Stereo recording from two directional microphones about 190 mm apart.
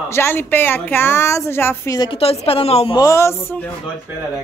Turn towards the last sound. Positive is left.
turn(degrees=15)  # may be behind; listen again after turning